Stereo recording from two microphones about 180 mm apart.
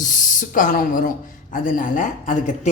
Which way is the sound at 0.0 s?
45° left (ahead or behind).